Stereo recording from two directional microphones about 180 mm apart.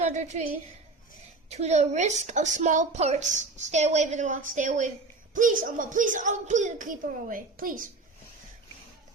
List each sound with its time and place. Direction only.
0.0 s a woman's voice: 40° right (ahead or behind)
1.5 s a woman's voice: 40° right (ahead or behind)